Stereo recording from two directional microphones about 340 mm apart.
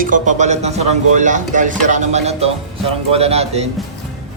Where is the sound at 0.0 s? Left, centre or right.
Right.